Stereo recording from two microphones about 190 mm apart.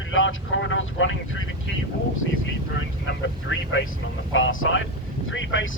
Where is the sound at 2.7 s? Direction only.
75° left (ahead or behind).